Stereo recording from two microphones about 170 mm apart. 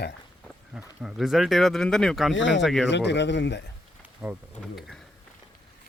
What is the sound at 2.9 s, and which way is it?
Speech, 90° left.